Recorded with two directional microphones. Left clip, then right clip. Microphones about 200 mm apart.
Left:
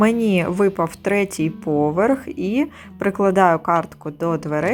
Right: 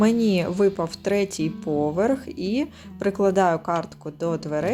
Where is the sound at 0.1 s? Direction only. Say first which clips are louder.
Left 2 dB; centre (ahead or behind).